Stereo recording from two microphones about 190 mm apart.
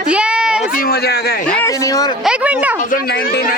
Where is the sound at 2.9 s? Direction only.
50° left (ahead or behind).